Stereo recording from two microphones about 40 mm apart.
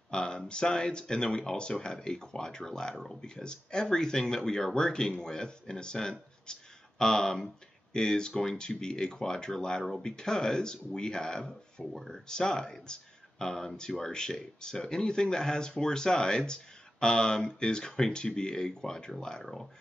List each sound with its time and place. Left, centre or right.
0.1 s speech: left
19.4 s speech: centre